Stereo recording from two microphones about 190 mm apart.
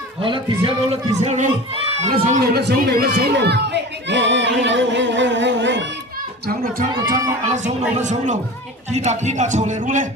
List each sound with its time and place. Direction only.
0.2 s speech: 25° right (ahead or behind)
2.4 s a man's voice: 55° right (ahead or behind)
6.4 s speech: 50° right (ahead or behind)